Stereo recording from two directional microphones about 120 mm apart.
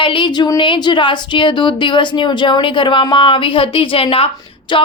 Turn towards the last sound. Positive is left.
turn(degrees=45)  # may be behind; listen again after turning